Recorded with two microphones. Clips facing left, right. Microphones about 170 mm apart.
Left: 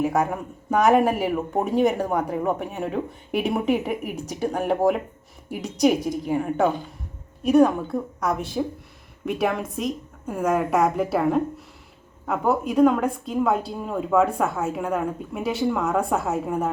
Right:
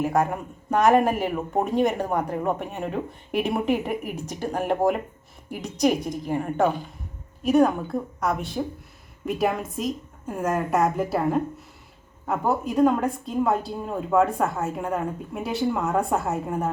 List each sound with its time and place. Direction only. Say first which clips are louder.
0.0 s speech: left 1 dB; centre (ahead or behind)